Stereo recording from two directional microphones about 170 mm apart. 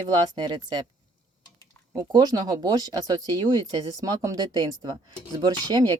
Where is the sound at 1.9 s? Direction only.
20° right (ahead or behind).